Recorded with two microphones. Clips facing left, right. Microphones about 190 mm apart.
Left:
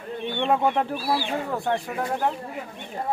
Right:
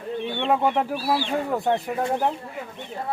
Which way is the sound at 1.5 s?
20° right (ahead or behind).